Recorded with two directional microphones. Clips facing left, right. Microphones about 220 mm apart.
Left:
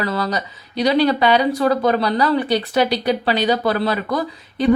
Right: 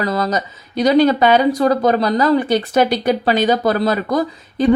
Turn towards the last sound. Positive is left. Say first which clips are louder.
# right 4 dB
turn(degrees=-45)  # may be behind; listen again after turning